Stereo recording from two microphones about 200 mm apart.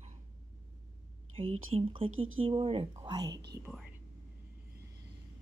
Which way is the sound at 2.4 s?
25° right (ahead or behind).